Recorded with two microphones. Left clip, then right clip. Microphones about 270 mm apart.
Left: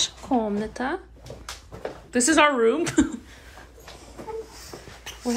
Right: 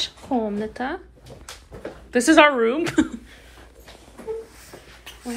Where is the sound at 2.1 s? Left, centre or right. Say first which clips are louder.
Right 4 dB; centre.